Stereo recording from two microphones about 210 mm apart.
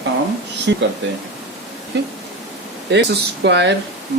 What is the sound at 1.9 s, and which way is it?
Speech, 60° right (ahead or behind).